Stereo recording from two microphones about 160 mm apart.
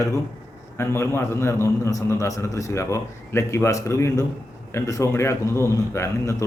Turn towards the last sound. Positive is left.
turn(degrees=20)  # may be behind; listen again after turning